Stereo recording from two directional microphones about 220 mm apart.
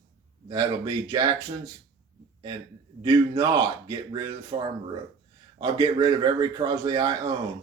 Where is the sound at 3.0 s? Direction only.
20° right (ahead or behind).